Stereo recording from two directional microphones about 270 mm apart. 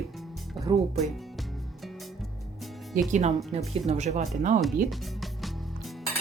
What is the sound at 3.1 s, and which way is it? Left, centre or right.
Speech, right.